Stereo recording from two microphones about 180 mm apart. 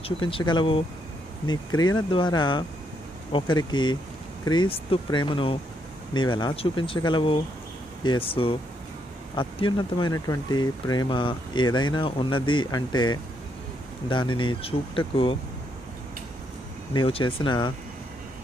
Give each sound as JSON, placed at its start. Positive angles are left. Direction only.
{"t": 0.0, "sound": "speech", "side_deg": 30}
{"t": 16.9, "sound": "speech", "side_deg": 30}